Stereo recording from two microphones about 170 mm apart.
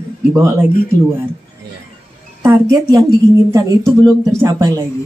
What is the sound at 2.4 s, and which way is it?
Speech, 20° right (ahead or behind).